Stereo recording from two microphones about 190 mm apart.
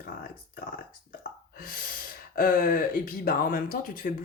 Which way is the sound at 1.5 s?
50° left (ahead or behind).